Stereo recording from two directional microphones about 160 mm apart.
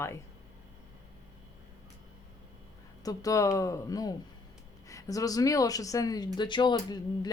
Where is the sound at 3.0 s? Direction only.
20° left (ahead or behind).